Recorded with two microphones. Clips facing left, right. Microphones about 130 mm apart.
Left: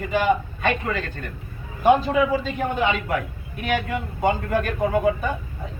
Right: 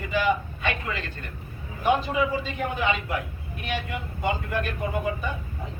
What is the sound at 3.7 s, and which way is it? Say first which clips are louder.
A man's voice: left 7 dB; 50° left (ahead or behind).